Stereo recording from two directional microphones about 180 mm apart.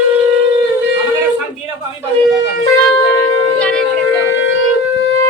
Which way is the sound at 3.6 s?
5° left (ahead or behind).